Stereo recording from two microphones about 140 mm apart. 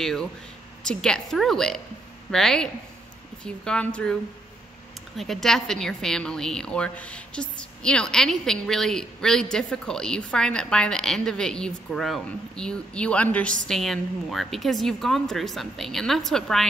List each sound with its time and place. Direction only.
0.0 s a woman's voice: 5° left (ahead or behind)